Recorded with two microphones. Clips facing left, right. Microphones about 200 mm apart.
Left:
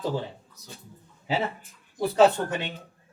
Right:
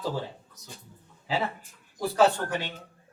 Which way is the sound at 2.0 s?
20° left (ahead or behind).